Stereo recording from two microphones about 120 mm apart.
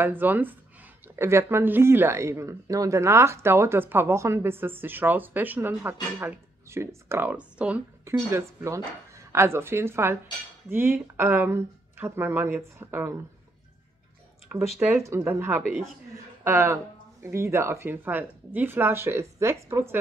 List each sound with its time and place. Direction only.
0.0 s speech: 15° right (ahead or behind)
8.0 s speech: 20° right (ahead or behind)
14.5 s speech: 15° right (ahead or behind)